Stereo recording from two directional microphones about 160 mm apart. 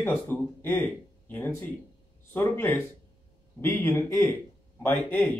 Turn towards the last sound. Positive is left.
turn(degrees=10)  # may be behind; listen again after turning